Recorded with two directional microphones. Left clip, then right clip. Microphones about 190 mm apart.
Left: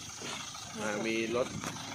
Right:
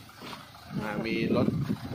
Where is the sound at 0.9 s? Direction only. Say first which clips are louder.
Right 1 dB; 50° right (ahead or behind).